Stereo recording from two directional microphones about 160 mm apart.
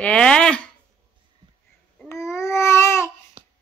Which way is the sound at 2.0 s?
20° left (ahead or behind).